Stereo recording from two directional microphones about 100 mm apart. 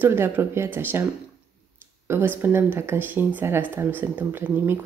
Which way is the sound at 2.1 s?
25° right (ahead or behind).